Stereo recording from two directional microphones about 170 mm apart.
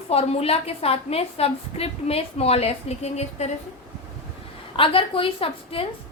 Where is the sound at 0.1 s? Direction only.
35° left (ahead or behind).